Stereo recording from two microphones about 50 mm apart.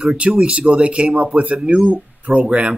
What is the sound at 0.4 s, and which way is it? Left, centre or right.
Speech, right.